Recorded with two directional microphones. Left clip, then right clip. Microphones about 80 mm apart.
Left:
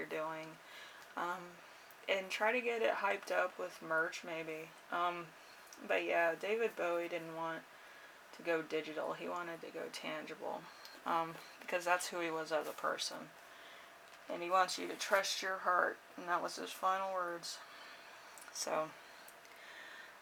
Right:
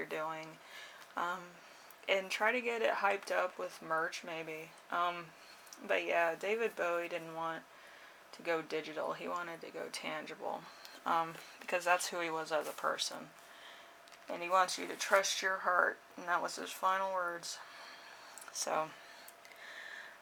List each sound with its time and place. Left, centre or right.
0.0 s a sound: right
1.1 s speech: right
14.3 s speech: right